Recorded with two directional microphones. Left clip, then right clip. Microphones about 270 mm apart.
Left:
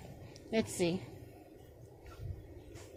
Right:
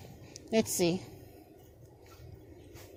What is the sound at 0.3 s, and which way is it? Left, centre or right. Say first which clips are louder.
Speech: right 5 dB; right.